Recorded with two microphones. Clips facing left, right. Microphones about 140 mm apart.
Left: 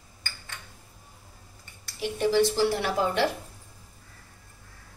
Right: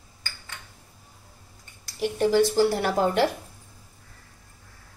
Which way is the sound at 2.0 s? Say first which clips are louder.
Right 2 dB; 50° right (ahead or behind).